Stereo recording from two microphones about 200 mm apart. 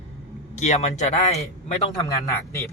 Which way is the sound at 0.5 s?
35° left (ahead or behind).